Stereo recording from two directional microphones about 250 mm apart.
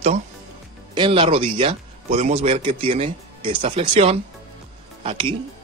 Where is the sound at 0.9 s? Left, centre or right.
Centre.